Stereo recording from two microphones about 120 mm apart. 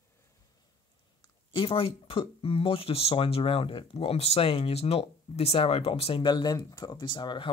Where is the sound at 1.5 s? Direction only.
50° left (ahead or behind).